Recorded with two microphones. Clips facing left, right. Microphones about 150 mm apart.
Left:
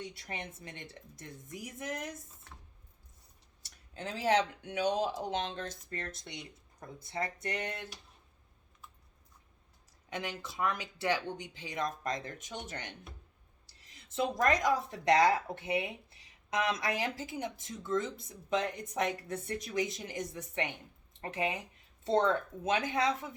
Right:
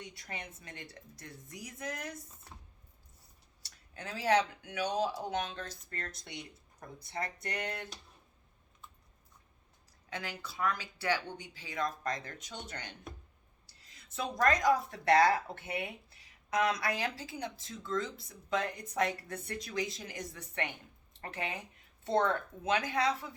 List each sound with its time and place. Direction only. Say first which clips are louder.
0.2 s speech: left 3 dB; 25° left (ahead or behind)
3.6 s speech: left 5 dB; 25° left (ahead or behind)
10.1 s speech: left 3 dB; 20° left (ahead or behind)